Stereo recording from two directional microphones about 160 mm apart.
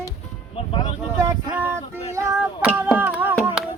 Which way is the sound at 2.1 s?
15° right (ahead or behind).